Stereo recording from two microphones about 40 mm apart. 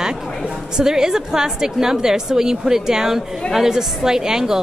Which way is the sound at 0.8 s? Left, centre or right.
Centre.